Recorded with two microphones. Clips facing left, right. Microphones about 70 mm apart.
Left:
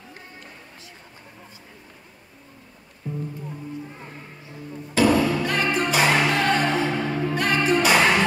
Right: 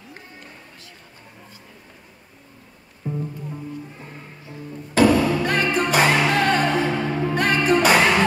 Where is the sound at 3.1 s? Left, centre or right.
Right.